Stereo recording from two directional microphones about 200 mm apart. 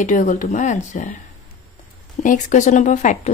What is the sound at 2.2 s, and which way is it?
Speech, 40° left (ahead or behind).